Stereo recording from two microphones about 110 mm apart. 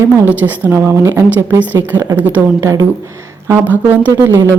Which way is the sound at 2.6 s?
25° right (ahead or behind).